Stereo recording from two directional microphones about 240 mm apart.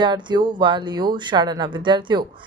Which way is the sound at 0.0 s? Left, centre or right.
Centre.